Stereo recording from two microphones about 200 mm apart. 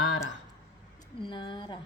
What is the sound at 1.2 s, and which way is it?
Speech, 25° left (ahead or behind).